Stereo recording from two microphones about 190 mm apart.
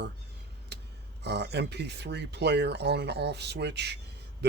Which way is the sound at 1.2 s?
65° right (ahead or behind).